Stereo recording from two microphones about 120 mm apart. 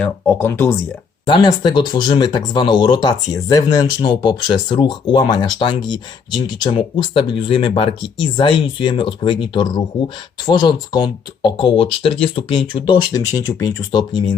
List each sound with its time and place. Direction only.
0.0 s speech: 15° left (ahead or behind)
1.3 s speech: 40° left (ahead or behind)
10.4 s speech: 40° left (ahead or behind)